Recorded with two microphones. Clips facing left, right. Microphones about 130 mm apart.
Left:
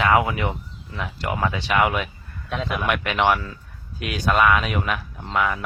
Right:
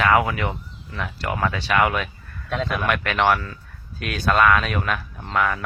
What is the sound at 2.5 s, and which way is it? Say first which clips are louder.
Speech: right 2 dB; 5° left (ahead or behind).